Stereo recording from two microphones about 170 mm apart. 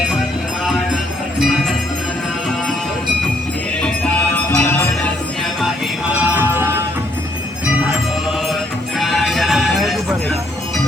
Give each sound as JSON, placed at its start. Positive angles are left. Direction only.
{"t": 1.4, "sound": "music", "side_deg": 0}
{"t": 3.8, "sound": "music", "side_deg": 5}
{"t": 6.1, "sound": "music", "side_deg": -10}
{"t": 9.0, "sound": "music", "side_deg": 0}